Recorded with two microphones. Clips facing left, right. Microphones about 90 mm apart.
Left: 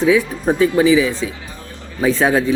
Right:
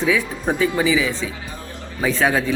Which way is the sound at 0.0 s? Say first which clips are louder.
Left 5 dB; 20° left (ahead or behind).